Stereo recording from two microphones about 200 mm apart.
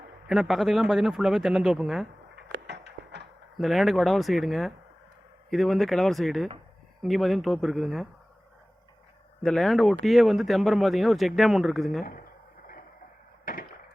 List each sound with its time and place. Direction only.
0.3 s speech: centre (ahead or behind)
2.3 s a sound: 60° right (ahead or behind)
3.6 s speech: centre (ahead or behind)
9.4 s speech: centre (ahead or behind)
13.4 s chop: 45° left (ahead or behind)